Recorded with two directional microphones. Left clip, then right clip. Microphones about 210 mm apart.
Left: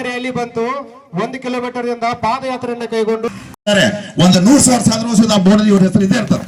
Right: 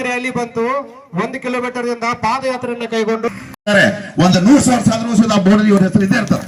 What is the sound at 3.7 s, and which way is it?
Speech, 90° left.